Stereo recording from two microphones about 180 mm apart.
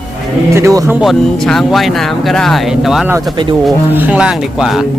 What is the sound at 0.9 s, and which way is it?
Speech, centre (ahead or behind).